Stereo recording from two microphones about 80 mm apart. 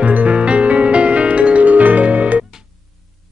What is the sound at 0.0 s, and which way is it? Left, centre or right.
Music, centre.